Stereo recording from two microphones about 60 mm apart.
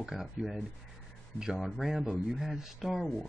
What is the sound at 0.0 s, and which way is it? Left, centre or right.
Speech, centre.